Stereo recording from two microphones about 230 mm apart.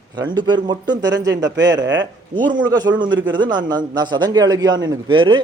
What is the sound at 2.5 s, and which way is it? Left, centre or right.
Speech, centre.